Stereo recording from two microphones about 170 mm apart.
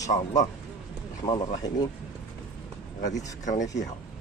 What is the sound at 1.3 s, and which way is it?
Speech, 25° left (ahead or behind).